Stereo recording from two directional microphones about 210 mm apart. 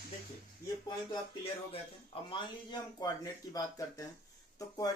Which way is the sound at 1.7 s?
25° left (ahead or behind).